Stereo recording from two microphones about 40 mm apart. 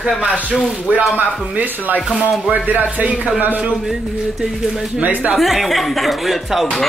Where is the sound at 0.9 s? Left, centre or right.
Right.